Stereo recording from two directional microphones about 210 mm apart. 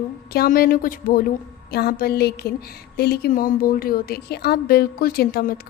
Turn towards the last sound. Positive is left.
turn(degrees=45)  # may be behind; listen again after turning